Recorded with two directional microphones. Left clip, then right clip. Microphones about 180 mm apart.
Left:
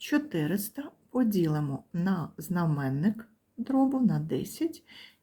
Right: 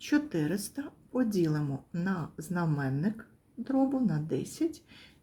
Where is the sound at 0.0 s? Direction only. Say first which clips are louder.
Even; 15° left (ahead or behind).